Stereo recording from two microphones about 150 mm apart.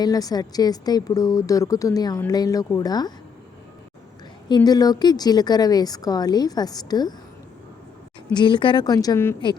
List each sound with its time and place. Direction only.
0.0 s a woman's voice: 25° left (ahead or behind)
4.4 s a woman's voice: 30° left (ahead or behind)
8.3 s a woman's voice: 30° left (ahead or behind)